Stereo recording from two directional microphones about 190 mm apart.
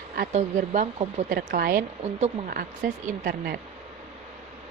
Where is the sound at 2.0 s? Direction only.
35° right (ahead or behind).